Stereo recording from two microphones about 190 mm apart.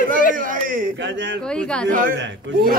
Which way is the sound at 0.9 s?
70° right (ahead or behind).